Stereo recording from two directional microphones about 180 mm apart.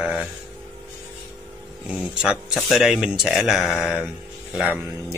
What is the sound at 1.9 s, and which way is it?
Speech, 5° right (ahead or behind).